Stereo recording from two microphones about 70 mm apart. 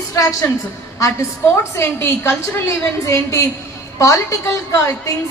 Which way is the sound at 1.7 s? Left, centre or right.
Left.